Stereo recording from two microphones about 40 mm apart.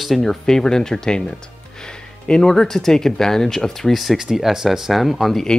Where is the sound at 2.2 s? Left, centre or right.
Centre.